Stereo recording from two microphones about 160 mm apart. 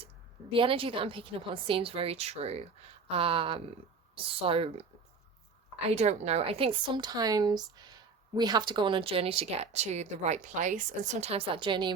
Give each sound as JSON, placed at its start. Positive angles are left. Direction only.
{"t": 0.5, "sound": "a woman's voice", "side_deg": -35}
{"t": 5.9, "sound": "a woman's voice", "side_deg": -45}